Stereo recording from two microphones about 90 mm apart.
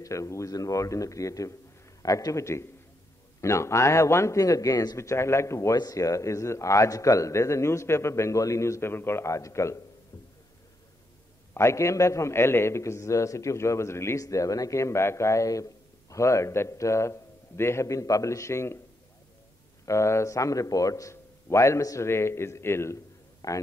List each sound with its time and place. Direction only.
0.0 s a man's voice: 35° left (ahead or behind)
11.5 s a man's voice: 30° left (ahead or behind)
19.9 s a man's voice: 35° left (ahead or behind)
23.4 s speech: 45° left (ahead or behind)